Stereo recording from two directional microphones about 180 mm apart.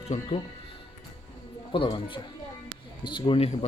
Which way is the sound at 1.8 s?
30° left (ahead or behind).